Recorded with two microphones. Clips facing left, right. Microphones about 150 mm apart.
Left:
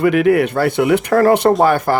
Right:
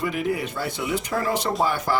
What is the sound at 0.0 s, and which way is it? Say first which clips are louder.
Speech: left 13 dB; 70° left (ahead or behind).